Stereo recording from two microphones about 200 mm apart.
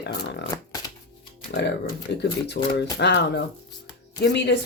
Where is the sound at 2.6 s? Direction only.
50° left (ahead or behind).